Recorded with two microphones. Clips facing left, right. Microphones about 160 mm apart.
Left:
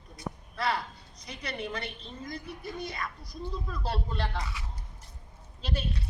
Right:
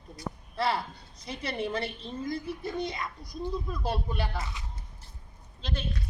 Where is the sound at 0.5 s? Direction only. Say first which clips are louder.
Right 2 dB; 30° right (ahead or behind); by 4.4 s 10° right (ahead or behind).